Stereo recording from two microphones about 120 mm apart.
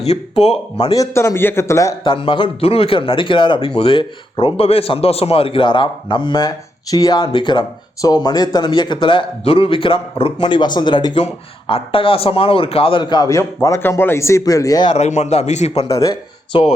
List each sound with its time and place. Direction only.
0.0 s a man's voice: 60° left (ahead or behind)
0.9 s a man's voice: 25° left (ahead or behind)
2.0 s a man's voice: 45° left (ahead or behind)
11.7 s a man's voice: 50° left (ahead or behind); by 14.9 s 35° left (ahead or behind)
14.9 s a man's voice: 70° left (ahead or behind)
16.5 s speech: 45° left (ahead or behind)